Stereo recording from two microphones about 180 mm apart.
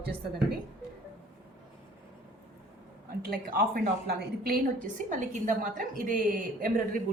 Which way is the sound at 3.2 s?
55° right (ahead or behind).